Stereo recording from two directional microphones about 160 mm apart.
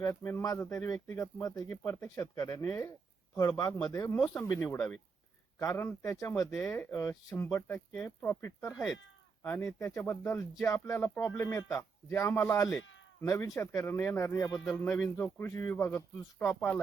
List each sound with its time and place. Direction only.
0.0 s speech: 15° left (ahead or behind)